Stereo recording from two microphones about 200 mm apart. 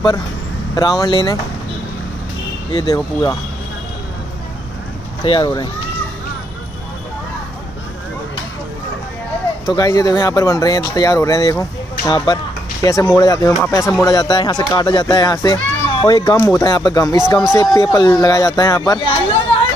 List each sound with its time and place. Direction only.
0.7 s speech: 20° left (ahead or behind)
2.7 s speech: 20° left (ahead or behind)
5.2 s speech: 25° left (ahead or behind)
9.7 s speech: 15° left (ahead or behind)